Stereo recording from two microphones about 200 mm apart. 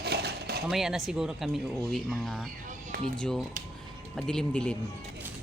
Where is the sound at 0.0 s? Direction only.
55° right (ahead or behind).